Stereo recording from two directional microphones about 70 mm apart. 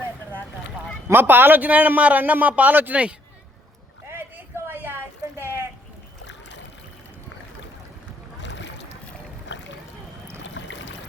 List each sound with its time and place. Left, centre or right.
1.0 s a man's voice: right
4.0 s vehicle: right
5.4 s a sound: right